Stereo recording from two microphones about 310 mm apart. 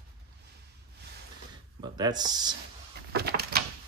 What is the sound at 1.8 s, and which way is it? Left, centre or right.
Speech, centre.